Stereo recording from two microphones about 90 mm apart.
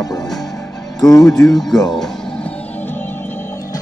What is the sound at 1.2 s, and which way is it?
Speech, 5° left (ahead or behind).